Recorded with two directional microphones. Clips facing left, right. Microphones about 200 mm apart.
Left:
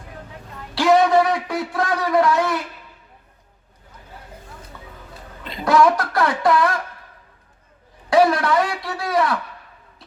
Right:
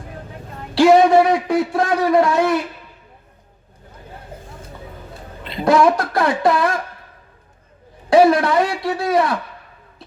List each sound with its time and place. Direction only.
0.8 s a man's voice: 25° right (ahead or behind)
5.5 s a man's voice: 25° right (ahead or behind)
8.1 s a man's voice: 25° right (ahead or behind)